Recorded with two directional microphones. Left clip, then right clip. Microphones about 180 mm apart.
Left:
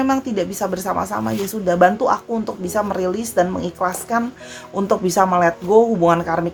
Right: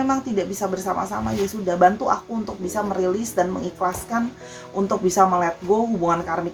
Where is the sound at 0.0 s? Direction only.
40° left (ahead or behind).